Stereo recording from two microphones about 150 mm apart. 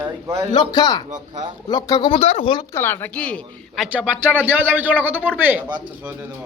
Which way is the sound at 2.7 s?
15° left (ahead or behind).